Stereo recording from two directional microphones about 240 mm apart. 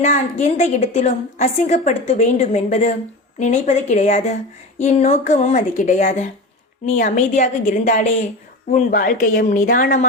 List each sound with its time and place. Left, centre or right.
0.0 s a woman's voice: left